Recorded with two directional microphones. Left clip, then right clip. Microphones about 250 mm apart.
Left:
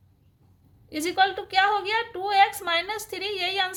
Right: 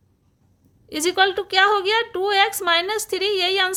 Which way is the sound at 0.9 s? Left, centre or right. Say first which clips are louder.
Right 4 dB; right.